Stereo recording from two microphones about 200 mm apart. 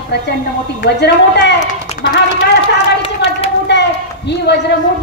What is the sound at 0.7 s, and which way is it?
Speech, 55° left (ahead or behind).